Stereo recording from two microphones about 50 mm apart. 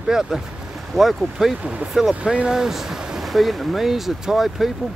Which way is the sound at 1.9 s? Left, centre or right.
Centre.